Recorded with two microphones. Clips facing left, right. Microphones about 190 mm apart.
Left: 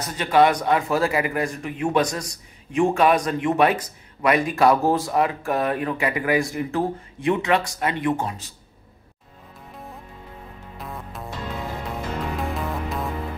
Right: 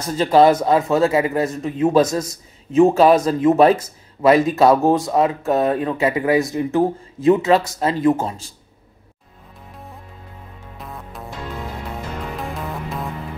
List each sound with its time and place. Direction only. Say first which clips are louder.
0.0 s a man's voice: right 5 dB; 25° right (ahead or behind)
10.8 s music: even; centre (ahead or behind)
12.4 s music: left 1 dB; centre (ahead or behind)